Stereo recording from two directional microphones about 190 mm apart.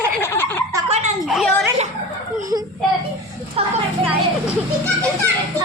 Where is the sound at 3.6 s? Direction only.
30° right (ahead or behind).